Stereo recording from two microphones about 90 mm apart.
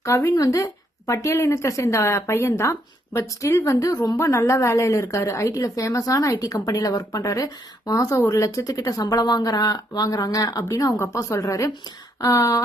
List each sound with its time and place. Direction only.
0.0 s a woman's voice: 35° left (ahead or behind)